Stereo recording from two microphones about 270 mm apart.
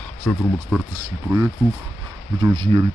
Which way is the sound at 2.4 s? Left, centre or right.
Centre.